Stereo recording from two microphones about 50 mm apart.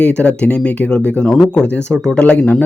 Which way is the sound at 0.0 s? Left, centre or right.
Left.